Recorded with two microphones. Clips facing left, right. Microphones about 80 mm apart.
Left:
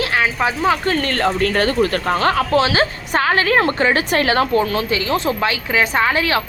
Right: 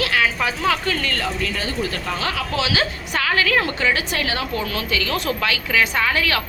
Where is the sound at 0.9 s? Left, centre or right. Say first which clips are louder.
Left 6 dB; left.